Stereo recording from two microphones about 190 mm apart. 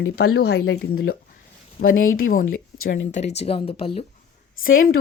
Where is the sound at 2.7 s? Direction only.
85° left.